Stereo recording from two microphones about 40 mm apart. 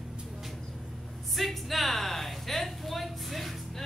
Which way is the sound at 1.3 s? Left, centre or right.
Centre.